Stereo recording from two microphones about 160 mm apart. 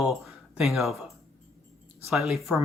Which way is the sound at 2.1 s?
Centre (ahead or behind).